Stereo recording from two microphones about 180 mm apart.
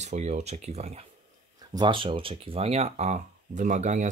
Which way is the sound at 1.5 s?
25° right (ahead or behind).